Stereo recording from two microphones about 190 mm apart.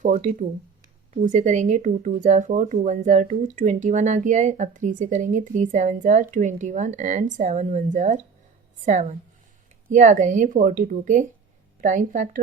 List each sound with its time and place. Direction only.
0.0 s a woman's voice: 40° right (ahead or behind)